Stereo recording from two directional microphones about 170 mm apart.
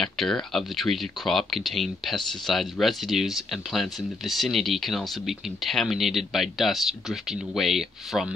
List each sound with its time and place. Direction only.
0.0 s speech: 5° left (ahead or behind)